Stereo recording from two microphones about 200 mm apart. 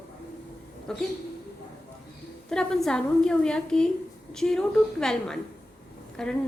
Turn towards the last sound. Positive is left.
turn(degrees=5)  # may be behind; listen again after turning